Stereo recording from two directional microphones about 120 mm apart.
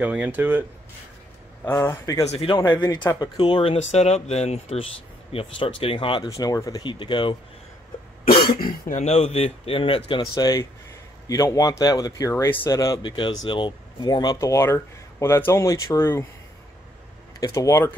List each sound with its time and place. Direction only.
0.0 s speech: 10° right (ahead or behind)
1.9 s speech: 25° left (ahead or behind)
2.4 s speech: 40° left (ahead or behind)
3.7 s speech: 60° left (ahead or behind)
5.3 s speech: 50° left (ahead or behind)
6.3 s speech: 30° left (ahead or behind)
8.9 s speech: 65° left (ahead or behind); by 10.2 s 45° left (ahead or behind)
10.3 s speech: 30° left (ahead or behind)
13.0 s speech: 40° left (ahead or behind); by 16.3 s 20° left (ahead or behind)
17.4 s speech: 25° left (ahead or behind)